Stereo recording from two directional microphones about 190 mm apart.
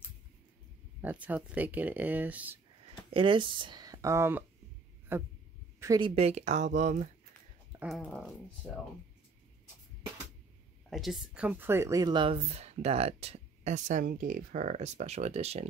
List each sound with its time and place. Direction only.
1.0 s speech: 10° right (ahead or behind)
3.1 s speech: 25° right (ahead or behind)
8.0 s speech: 5° left (ahead or behind)
10.9 s speech: centre (ahead or behind); by 15.7 s 35° right (ahead or behind)